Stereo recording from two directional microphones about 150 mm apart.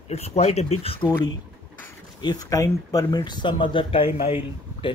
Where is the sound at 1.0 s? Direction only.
20° left (ahead or behind); by 4.9 s 35° left (ahead or behind).